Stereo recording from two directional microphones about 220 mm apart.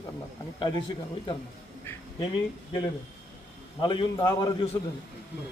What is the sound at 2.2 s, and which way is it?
A man's voice, 20° left (ahead or behind).